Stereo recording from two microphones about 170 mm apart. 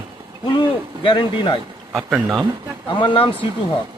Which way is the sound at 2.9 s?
30° left (ahead or behind).